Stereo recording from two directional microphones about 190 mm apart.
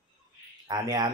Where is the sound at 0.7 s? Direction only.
20° right (ahead or behind).